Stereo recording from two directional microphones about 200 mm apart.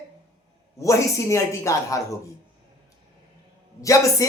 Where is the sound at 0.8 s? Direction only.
15° left (ahead or behind).